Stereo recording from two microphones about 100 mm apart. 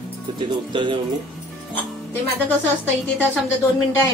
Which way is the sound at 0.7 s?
55° right (ahead or behind).